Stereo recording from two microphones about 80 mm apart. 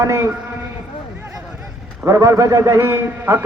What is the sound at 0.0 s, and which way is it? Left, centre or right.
Speech, right.